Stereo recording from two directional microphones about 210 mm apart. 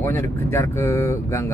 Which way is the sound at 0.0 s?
10° left (ahead or behind).